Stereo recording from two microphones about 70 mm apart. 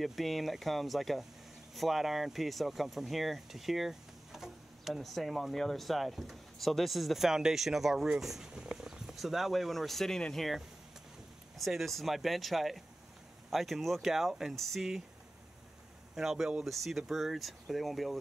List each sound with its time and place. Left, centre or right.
0.0 s speech: centre
16.2 s speech: centre